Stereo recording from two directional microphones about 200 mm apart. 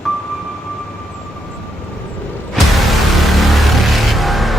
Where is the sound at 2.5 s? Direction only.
Centre (ahead or behind).